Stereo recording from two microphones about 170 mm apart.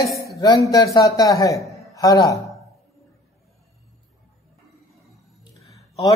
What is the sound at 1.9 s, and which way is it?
Speech, 20° left (ahead or behind).